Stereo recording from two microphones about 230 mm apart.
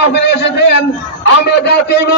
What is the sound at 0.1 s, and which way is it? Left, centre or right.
A man's voice, left.